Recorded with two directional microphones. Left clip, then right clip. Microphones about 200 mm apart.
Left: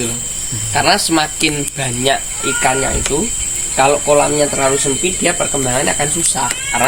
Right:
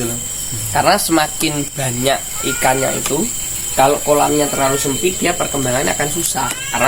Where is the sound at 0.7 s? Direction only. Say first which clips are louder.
Even; 5° left (ahead or behind).